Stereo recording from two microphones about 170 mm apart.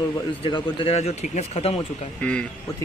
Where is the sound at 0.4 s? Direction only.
30° left (ahead or behind).